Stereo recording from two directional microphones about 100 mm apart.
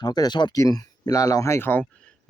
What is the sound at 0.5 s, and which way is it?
Speech, 35° left (ahead or behind).